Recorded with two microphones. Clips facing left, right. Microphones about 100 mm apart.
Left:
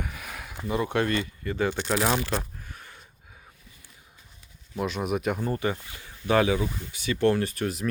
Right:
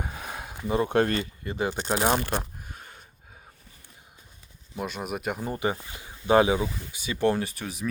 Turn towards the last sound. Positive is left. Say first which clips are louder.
# left 4 dB
turn(degrees=0)  # may be behind; listen again after turning